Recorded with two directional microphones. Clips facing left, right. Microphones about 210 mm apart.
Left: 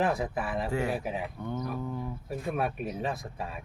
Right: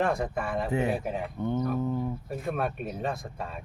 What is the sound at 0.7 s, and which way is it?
Speech, 20° right (ahead or behind).